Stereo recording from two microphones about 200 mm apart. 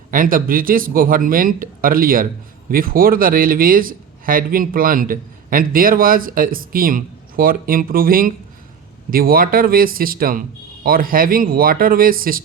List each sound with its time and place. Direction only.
0.1 s speech: 45° right (ahead or behind)